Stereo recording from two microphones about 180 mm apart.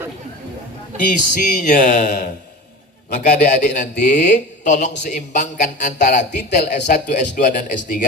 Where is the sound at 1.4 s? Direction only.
50° left (ahead or behind).